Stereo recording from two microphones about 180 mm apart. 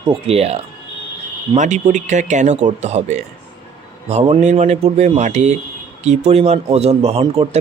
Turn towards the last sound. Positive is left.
turn(degrees=-30)  # may be behind; listen again after turning